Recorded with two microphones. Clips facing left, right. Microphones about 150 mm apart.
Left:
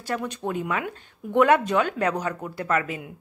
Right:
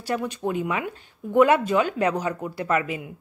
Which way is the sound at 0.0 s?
10° right (ahead or behind).